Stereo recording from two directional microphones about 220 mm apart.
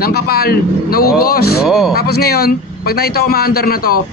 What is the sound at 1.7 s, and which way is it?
Speech, centre (ahead or behind).